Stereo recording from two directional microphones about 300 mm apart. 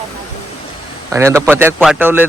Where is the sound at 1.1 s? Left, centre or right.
Centre.